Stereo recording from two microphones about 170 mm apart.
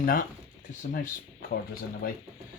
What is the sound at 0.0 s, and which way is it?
Speech, 60° left (ahead or behind).